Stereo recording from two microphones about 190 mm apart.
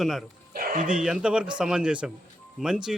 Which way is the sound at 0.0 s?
Centre (ahead or behind).